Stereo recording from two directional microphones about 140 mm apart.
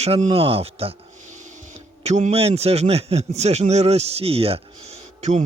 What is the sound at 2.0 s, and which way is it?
Speech, 55° right (ahead or behind).